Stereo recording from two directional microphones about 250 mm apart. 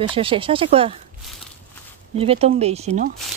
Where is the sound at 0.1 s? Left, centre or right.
Right.